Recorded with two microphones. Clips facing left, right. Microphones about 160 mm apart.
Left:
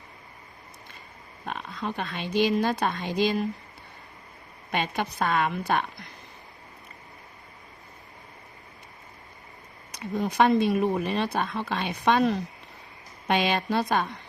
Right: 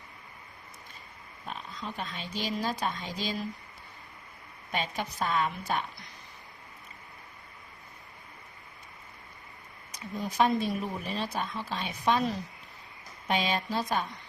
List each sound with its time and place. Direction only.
1.5 s speech: 65° left (ahead or behind)
4.7 s speech: 70° left (ahead or behind)
9.9 s speech: 65° left (ahead or behind)